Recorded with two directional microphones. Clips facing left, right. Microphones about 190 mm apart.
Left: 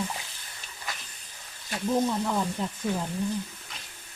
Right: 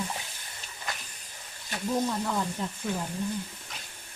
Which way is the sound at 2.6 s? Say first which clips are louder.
Left 2 dB; 20° left (ahead or behind).